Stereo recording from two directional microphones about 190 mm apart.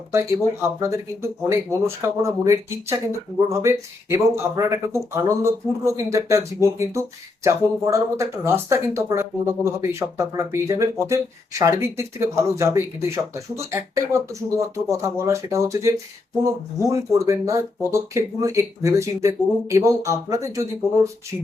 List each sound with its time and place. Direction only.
0.1 s speech: 15° right (ahead or behind)